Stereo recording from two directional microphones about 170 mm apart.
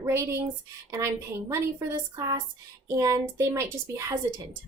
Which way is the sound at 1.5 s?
20° right (ahead or behind).